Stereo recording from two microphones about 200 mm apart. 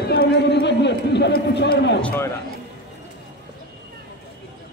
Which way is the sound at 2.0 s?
10° left (ahead or behind).